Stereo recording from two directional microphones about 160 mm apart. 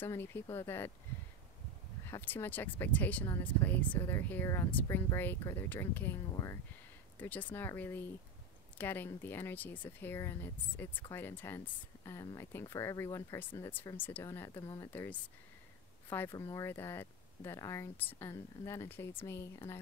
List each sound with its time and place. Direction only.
0.0 s speech: 15° left (ahead or behind)
2.0 s speech: 15° left (ahead or behind)
7.2 s speech: 10° left (ahead or behind)
16.3 s speech: 25° left (ahead or behind)